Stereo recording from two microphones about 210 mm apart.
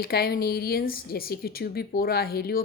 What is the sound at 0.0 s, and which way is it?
A woman's voice, 45° left (ahead or behind).